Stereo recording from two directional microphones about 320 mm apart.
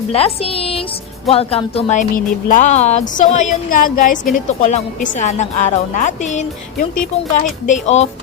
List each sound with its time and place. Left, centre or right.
0.1 s speech: centre